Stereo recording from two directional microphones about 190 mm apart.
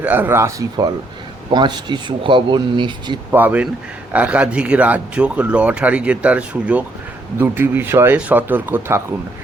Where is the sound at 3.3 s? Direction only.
10° right (ahead or behind).